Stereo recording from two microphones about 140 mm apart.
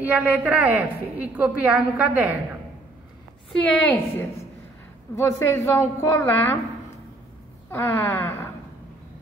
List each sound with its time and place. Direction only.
0.0 s a woman's voice: 10° right (ahead or behind)
3.6 s a woman's voice: 5° left (ahead or behind)
3.9 s a woman's voice: 15° left (ahead or behind)
7.7 s a woman's voice: 20° left (ahead or behind)